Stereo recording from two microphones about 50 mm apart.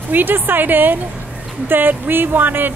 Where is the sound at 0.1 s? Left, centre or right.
Right.